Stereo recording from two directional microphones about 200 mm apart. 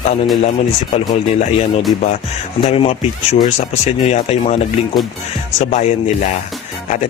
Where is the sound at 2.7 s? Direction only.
30° left (ahead or behind).